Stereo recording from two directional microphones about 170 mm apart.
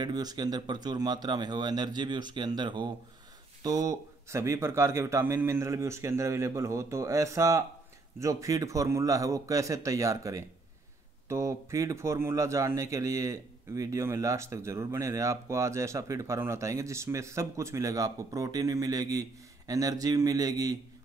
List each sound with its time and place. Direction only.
0.0 s a man's voice: 25° right (ahead or behind)